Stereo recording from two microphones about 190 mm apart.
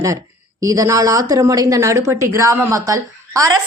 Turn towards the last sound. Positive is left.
turn(degrees=-15)  # may be behind; listen again after turning